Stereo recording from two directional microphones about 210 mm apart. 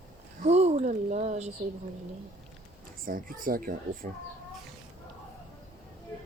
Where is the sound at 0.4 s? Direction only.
30° right (ahead or behind).